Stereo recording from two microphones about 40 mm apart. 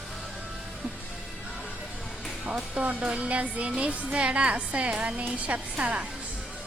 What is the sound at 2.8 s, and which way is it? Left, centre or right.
A woman's voice, right.